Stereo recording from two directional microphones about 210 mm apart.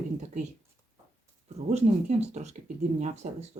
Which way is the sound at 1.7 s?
30° right (ahead or behind).